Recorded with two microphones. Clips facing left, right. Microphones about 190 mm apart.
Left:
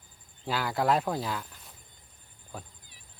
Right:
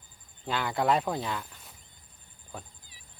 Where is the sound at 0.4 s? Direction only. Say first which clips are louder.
Even; 5° left (ahead or behind).